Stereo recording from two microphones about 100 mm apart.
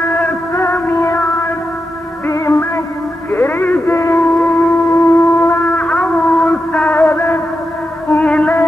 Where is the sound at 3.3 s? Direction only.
20° left (ahead or behind).